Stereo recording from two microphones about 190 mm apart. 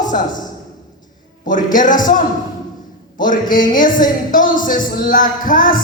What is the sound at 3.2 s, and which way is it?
Speech, 45° left (ahead or behind).